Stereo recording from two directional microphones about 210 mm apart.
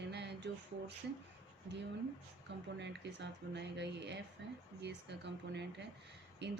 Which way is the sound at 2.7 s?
55° right (ahead or behind).